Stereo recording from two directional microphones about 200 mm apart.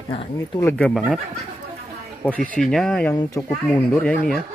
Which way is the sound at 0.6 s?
10° left (ahead or behind).